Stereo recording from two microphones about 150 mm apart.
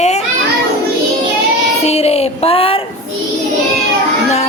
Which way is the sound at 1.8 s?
45° left (ahead or behind).